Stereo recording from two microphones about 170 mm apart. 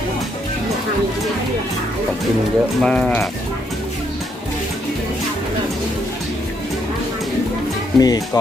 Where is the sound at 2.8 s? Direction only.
5° left (ahead or behind).